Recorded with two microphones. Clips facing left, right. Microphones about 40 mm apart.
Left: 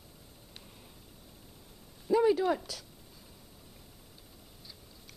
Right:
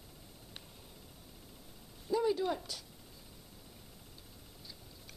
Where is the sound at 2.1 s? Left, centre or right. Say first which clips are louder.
Left 6 dB; left.